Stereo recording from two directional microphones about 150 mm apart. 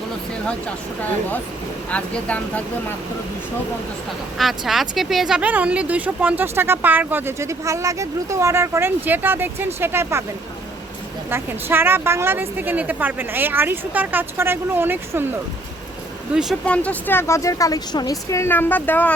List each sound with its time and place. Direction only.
1.9 s speech: 10° left (ahead or behind)
4.4 s speech: centre (ahead or behind); by 10.2 s 15° right (ahead or behind)
11.3 s speech: 15° right (ahead or behind)
16.3 s speech: 5° right (ahead or behind)
16.6 s speech: 10° left (ahead or behind)